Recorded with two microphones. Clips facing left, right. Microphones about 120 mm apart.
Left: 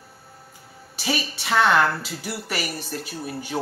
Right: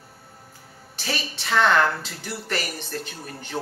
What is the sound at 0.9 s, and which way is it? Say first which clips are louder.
A woman's voice: left 4 dB; 10° left (ahead or behind).